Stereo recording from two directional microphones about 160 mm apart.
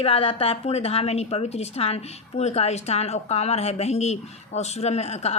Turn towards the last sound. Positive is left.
turn(degrees=40)  # may be behind; listen again after turning